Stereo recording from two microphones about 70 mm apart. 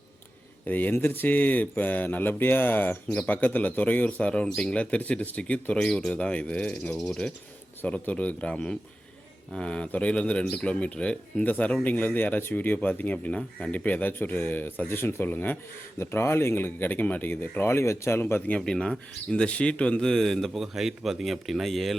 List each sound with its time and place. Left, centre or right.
0.6 s speech: left; by 7.3 s centre
7.8 s speech: left
16.0 s speech: left
18.5 s speech: centre